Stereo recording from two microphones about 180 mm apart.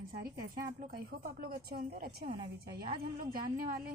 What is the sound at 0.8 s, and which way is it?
Speech, 55° right (ahead or behind).